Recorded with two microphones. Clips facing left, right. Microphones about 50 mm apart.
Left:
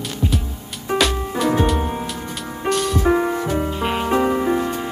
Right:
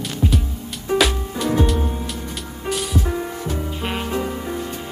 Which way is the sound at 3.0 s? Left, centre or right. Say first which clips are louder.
Left 8 dB; left.